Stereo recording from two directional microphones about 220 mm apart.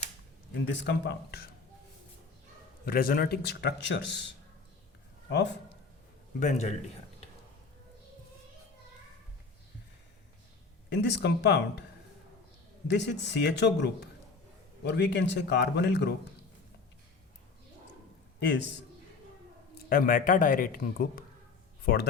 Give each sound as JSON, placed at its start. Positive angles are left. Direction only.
{"t": 0.7, "sound": "speech", "side_deg": 50}
{"t": 2.8, "sound": "speech", "side_deg": 40}
{"t": 5.3, "sound": "speech", "side_deg": 55}
{"t": 6.4, "sound": "speech", "side_deg": 30}
{"t": 10.8, "sound": "speech", "side_deg": 50}
{"t": 12.9, "sound": "speech", "side_deg": 50}
{"t": 18.3, "sound": "a man's voice", "side_deg": 50}
{"t": 19.7, "sound": "speech", "side_deg": 40}